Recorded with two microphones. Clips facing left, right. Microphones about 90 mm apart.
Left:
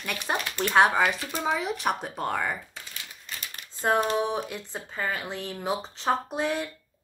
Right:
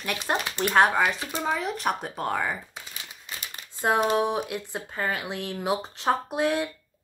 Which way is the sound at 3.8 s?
10° right (ahead or behind).